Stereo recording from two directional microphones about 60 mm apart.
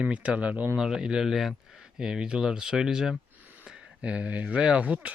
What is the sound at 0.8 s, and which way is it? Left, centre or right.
Speech, centre.